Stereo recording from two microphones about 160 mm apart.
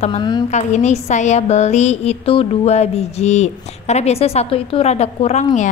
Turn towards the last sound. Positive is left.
turn(degrees=45)  # may be behind; listen again after turning